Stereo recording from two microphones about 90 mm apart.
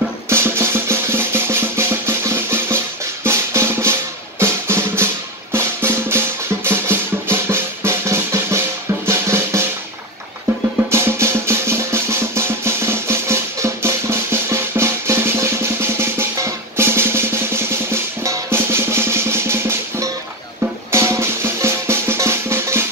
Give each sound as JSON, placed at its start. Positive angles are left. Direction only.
{"t": 0.3, "sound": "drum", "side_deg": -30}
{"t": 10.9, "sound": "drum", "side_deg": -30}
{"t": 20.9, "sound": "music", "side_deg": -30}